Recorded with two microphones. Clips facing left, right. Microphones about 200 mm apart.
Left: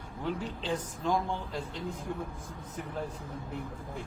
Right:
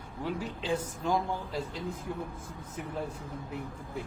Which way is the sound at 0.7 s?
10° right (ahead or behind).